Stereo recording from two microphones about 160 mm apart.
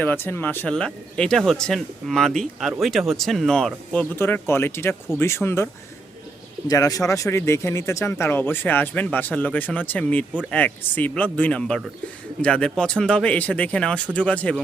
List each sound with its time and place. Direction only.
0.0 s speech: 10° left (ahead or behind)
6.7 s speech: 20° left (ahead or behind)